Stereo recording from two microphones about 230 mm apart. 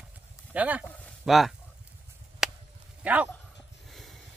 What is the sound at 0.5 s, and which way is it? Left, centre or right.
Speech, centre.